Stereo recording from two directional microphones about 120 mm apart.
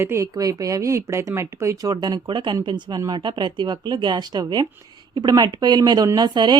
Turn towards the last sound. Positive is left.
turn(degrees=-35)  # may be behind; listen again after turning